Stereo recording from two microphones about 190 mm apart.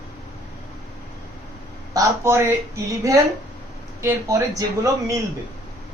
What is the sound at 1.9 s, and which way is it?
Speech, 15° right (ahead or behind).